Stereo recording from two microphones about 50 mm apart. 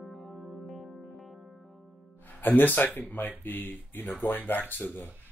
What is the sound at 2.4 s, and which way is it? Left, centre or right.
Speech, left.